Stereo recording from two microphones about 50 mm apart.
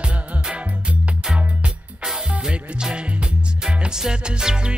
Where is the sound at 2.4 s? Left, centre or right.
Centre.